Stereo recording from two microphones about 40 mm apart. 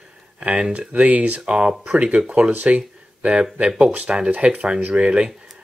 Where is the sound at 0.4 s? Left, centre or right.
Right.